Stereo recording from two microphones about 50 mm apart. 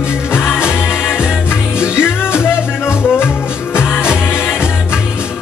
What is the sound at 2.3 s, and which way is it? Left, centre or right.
Music, left.